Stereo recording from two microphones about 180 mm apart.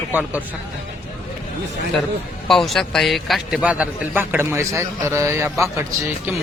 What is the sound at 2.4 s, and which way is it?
A man's voice, centre (ahead or behind).